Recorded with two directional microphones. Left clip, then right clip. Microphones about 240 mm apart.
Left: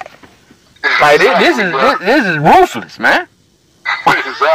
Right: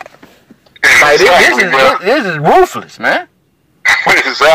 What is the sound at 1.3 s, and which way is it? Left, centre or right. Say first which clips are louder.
Speech: right 4 dB; right.